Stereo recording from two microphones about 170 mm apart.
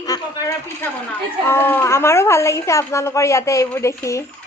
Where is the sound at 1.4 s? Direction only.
15° left (ahead or behind).